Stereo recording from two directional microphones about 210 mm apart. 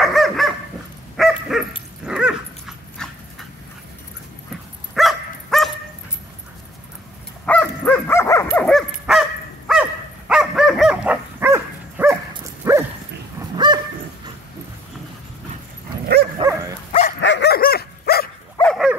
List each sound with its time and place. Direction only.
0.0 s dog: centre (ahead or behind)
4.9 s dog: centre (ahead or behind)
7.4 s dog: 5° left (ahead or behind)
8.6 s dog: centre (ahead or behind); by 13.7 s 20° right (ahead or behind)
16.3 s dog: 15° right (ahead or behind)
17.0 s dog: 55° left (ahead or behind)
18.6 s dog: centre (ahead or behind)